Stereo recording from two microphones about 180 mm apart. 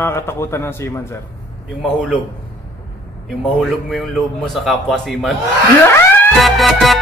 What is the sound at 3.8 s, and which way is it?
A man's voice, centre (ahead or behind).